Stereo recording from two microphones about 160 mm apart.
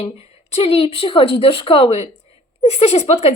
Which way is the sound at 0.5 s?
35° left (ahead or behind).